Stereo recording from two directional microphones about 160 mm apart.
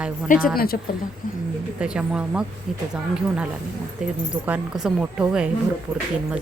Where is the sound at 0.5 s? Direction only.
70° left (ahead or behind).